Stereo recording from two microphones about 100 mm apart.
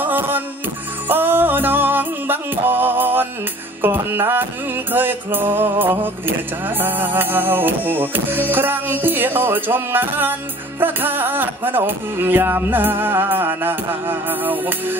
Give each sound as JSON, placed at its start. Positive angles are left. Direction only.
{"t": 0.0, "sound": "music", "side_deg": -20}